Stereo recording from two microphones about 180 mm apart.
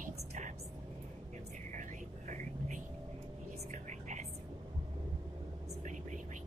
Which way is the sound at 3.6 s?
40° right (ahead or behind).